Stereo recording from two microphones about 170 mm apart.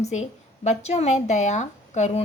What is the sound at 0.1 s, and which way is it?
Speech, 40° left (ahead or behind).